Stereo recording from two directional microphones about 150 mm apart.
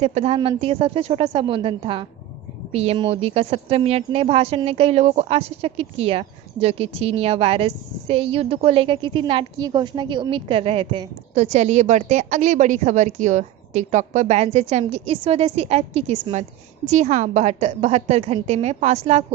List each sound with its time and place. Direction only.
0.0 s a woman's voice: 45° right (ahead or behind)
11.3 s a woman's voice: 45° right (ahead or behind)